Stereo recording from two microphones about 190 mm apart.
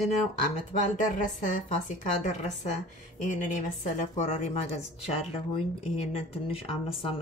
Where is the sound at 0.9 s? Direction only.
40° left (ahead or behind).